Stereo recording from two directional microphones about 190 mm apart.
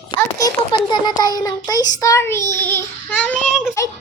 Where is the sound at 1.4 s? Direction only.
20° left (ahead or behind).